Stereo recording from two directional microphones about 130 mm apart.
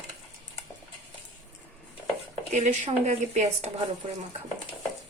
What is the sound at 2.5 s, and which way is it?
Speech, 65° right (ahead or behind).